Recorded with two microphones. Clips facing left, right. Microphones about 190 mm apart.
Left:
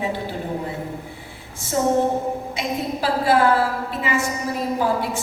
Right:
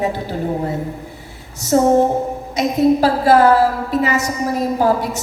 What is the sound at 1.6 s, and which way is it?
A woman's voice, 40° right (ahead or behind).